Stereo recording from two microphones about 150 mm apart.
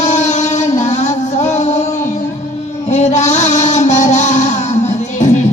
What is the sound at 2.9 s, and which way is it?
Music, 50° left (ahead or behind).